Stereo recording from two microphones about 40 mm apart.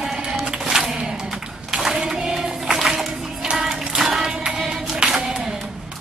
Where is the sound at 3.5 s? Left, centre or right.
Centre.